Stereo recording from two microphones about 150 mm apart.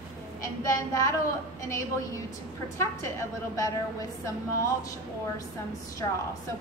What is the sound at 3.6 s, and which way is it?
Speech, 20° left (ahead or behind).